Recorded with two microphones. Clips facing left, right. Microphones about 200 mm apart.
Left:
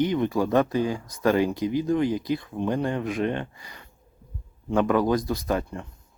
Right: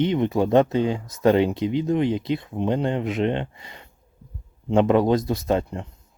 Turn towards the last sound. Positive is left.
turn(degrees=-25)  # may be behind; listen again after turning